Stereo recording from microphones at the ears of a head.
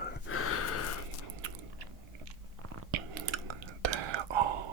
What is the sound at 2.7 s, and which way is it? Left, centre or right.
Whispering, right.